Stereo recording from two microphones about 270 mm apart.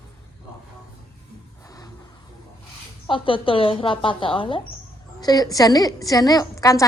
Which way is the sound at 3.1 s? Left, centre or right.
Centre.